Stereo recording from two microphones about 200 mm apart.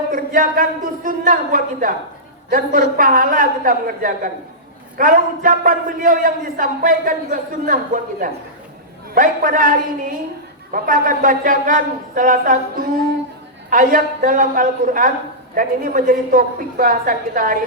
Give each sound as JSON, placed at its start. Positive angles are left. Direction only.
{"t": 0.1, "sound": "a man's voice", "side_deg": -45}